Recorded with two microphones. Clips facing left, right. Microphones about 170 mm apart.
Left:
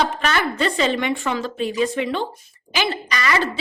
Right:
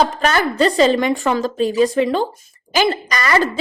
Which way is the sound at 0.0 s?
40° right (ahead or behind).